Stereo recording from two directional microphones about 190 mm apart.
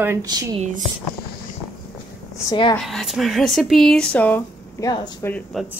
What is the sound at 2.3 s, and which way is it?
Speech, 20° left (ahead or behind).